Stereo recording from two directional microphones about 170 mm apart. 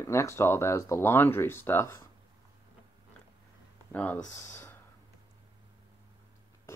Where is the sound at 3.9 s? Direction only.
10° left (ahead or behind).